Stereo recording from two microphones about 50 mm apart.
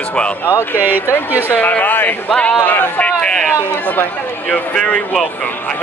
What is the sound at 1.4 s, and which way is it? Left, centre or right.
Speech, left.